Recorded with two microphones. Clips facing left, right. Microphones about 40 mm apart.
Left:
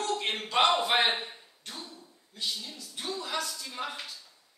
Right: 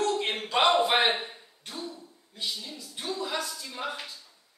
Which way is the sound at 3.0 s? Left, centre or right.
Centre.